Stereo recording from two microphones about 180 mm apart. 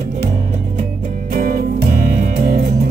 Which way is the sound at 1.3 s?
50° right (ahead or behind).